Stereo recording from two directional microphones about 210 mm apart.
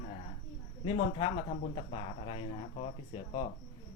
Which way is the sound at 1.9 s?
30° left (ahead or behind).